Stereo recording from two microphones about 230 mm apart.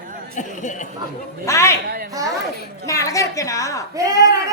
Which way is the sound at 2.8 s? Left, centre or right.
Centre.